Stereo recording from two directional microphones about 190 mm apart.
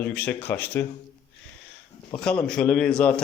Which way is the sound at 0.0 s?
10° left (ahead or behind).